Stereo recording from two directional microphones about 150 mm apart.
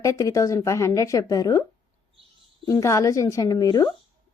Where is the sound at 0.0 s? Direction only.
20° left (ahead or behind).